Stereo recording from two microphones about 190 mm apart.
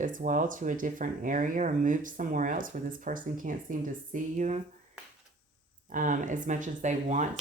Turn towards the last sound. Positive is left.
turn(degrees=-40)  # may be behind; listen again after turning